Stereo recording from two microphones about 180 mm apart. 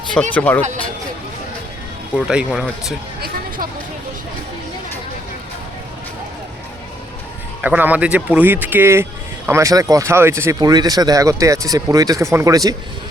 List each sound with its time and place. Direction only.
0.1 s speech: 5° left (ahead or behind)
2.1 s speech: 5° right (ahead or behind)
7.6 s speech: 10° right (ahead or behind)